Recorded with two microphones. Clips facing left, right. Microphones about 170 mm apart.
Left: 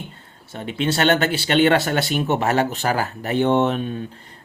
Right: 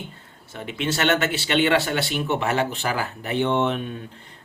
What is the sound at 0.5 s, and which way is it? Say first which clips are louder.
Speech: left 4 dB; 35° left (ahead or behind).